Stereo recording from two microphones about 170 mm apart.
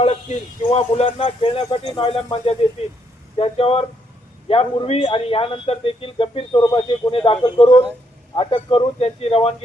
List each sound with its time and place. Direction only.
0.0 s a man's voice: 40° left (ahead or behind)